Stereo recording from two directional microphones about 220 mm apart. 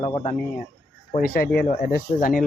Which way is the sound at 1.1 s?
40° left (ahead or behind).